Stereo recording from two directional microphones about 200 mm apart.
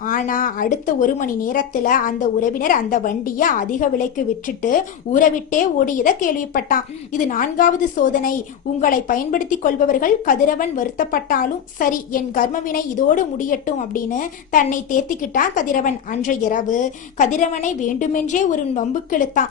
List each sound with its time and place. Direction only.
0.0 s a woman's voice: 45° left (ahead or behind)